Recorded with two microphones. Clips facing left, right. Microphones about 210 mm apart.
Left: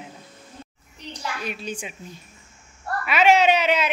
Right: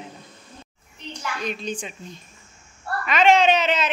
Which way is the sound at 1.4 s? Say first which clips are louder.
Right 2 dB; 10° left (ahead or behind).